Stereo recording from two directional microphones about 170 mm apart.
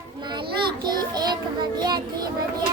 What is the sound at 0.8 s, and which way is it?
Child singing, 25° right (ahead or behind).